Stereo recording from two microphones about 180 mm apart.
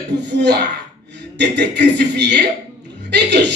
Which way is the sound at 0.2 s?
65° right (ahead or behind).